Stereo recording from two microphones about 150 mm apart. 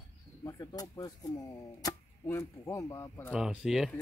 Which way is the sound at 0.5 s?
25° left (ahead or behind).